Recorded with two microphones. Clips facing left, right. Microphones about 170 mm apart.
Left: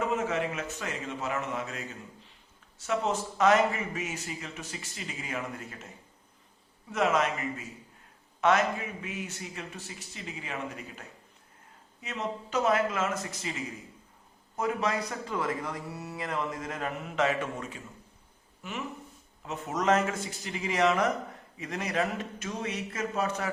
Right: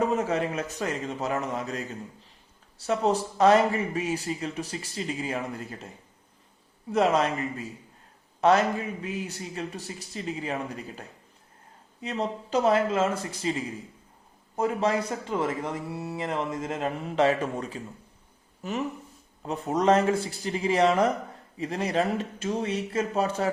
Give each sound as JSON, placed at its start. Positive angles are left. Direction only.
{"t": 0.0, "sound": "a man's voice", "side_deg": -35}
{"t": 6.9, "sound": "a man's voice", "side_deg": -35}
{"t": 12.0, "sound": "a man's voice", "side_deg": -35}